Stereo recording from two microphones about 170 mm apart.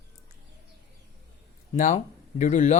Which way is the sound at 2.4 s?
45° left (ahead or behind).